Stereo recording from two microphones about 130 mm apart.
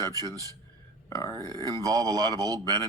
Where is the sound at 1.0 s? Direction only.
25° left (ahead or behind).